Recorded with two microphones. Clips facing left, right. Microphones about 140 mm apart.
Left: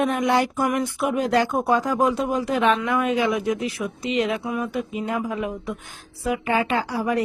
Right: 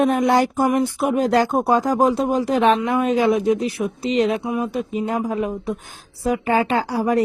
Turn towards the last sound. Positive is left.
turn(degrees=-40)  # may be behind; listen again after turning